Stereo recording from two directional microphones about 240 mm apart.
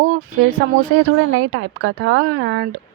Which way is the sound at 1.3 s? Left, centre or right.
Right.